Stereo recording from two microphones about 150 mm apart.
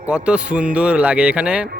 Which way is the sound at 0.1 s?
5° right (ahead or behind).